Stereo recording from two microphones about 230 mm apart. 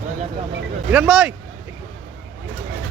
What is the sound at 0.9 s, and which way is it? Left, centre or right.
Speech, centre.